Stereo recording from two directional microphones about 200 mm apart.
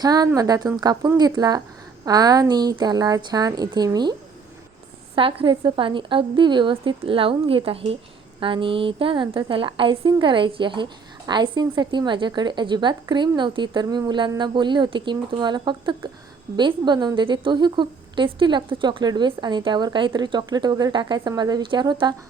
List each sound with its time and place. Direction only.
0.0 s a woman's voice: 20° right (ahead or behind)
5.1 s a woman's voice: 25° right (ahead or behind)